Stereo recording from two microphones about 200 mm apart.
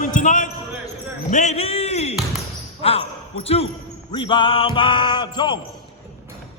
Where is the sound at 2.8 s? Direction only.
30° left (ahead or behind).